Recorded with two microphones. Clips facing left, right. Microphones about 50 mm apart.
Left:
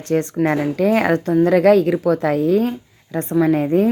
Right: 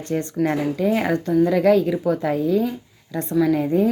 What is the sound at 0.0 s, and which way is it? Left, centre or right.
Speech, left.